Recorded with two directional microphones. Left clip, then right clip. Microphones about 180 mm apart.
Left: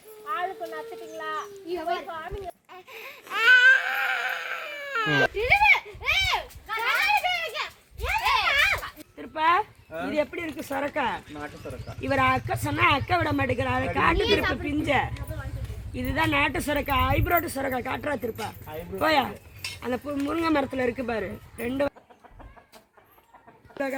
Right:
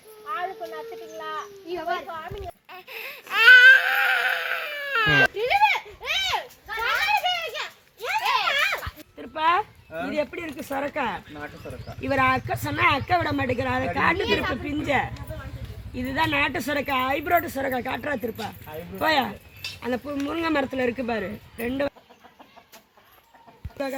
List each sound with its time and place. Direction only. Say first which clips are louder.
0.3 s speech: even; 5° left (ahead or behind)
2.7 s baby cry: right 5 dB; 25° right (ahead or behind)
7.5 s a sound: even; 35° right (ahead or behind)
10.1 s speech: left 1 dB; 40° right (ahead or behind)